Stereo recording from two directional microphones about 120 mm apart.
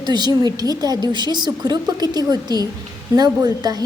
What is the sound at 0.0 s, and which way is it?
A woman's voice, 35° right (ahead or behind).